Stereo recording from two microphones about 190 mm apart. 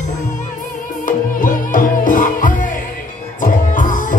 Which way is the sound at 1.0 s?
45° left (ahead or behind).